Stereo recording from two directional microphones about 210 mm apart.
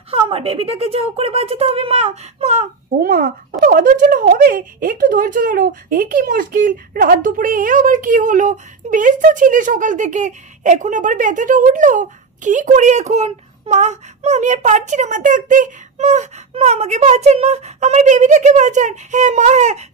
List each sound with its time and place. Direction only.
0.1 s speech: 25° right (ahead or behind)
3.1 s speech: 45° right (ahead or behind)